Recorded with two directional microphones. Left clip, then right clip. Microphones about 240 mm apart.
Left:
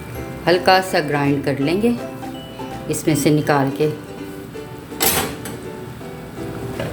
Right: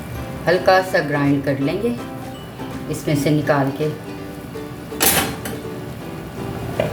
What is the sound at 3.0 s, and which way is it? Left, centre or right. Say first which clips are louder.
Speech: left 2 dB; left.